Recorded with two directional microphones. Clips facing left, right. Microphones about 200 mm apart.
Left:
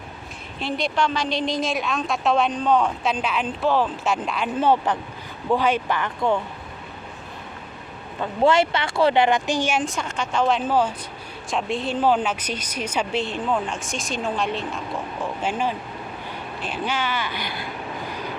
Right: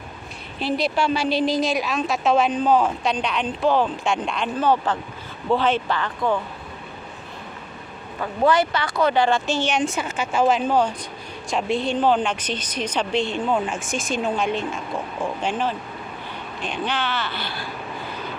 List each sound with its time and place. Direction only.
0.6 s a woman's voice: 5° right (ahead or behind)
4.5 s speech: 25° left (ahead or behind)
5.5 s speech: 10° left (ahead or behind)
8.2 s speech: 25° left (ahead or behind); by 10.6 s 5° right (ahead or behind)
10.7 s a woman's voice: 5° left (ahead or behind)